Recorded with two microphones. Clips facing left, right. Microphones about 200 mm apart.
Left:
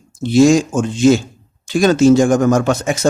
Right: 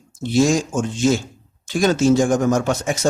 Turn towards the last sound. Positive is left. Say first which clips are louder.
# left 4 dB
turn(degrees=80)